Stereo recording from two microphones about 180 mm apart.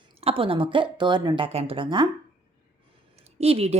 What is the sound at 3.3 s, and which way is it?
Speech, 35° right (ahead or behind).